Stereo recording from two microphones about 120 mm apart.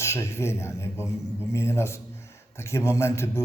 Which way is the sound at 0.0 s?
25° left (ahead or behind).